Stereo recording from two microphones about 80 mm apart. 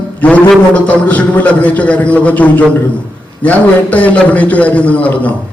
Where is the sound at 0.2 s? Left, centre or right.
Centre.